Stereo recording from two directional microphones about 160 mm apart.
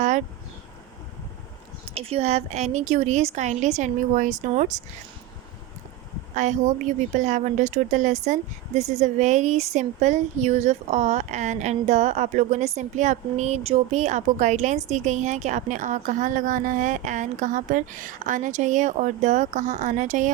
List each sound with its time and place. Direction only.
2.0 s a woman's voice: 40° right (ahead or behind)
6.3 s a woman's voice: 50° right (ahead or behind)